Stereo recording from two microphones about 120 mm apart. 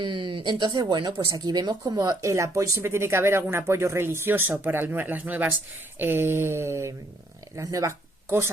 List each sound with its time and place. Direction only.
0.0 s speech: 45° right (ahead or behind); by 8.4 s 20° right (ahead or behind)